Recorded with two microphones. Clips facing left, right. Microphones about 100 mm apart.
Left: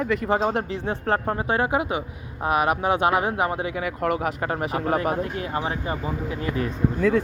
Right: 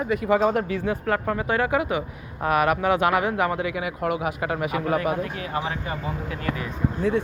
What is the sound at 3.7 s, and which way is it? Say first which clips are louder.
Speech: left 1 dB; 45° left (ahead or behind).